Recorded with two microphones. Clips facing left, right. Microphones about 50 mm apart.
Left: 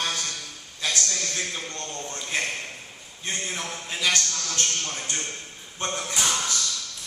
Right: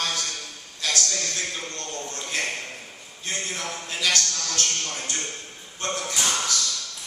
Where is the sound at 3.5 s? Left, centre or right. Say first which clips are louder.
Right 1 dB; centre.